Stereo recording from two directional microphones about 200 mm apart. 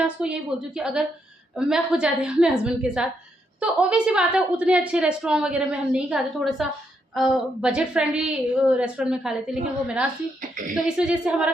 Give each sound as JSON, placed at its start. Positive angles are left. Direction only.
{"t": 0.0, "sound": "a woman's voice", "side_deg": -5}
{"t": 10.5, "sound": "speech", "side_deg": -40}
{"t": 10.8, "sound": "a woman's voice", "side_deg": -5}